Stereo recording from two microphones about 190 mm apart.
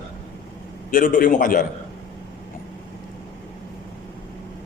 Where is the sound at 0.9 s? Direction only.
45° left (ahead or behind).